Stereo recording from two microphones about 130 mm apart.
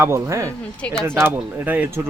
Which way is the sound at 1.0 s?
15° right (ahead or behind).